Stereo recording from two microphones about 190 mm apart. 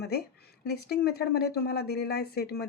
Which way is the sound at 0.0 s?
55° left (ahead or behind).